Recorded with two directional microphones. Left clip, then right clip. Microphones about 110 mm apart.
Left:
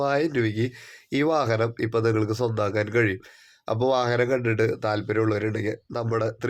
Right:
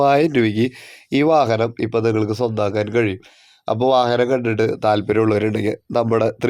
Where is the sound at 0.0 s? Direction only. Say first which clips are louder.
Right 9 dB; 55° right (ahead or behind).